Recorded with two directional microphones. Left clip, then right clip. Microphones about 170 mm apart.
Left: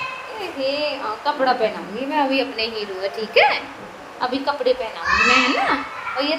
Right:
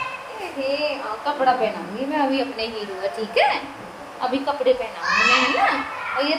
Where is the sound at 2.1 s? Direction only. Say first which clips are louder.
Left 3 dB; 35° left (ahead or behind).